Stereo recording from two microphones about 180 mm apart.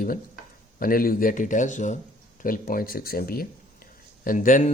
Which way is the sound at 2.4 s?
50° left (ahead or behind).